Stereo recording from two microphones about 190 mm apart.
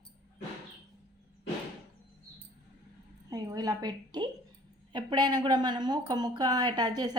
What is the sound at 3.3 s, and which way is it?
A woman's voice, 20° right (ahead or behind).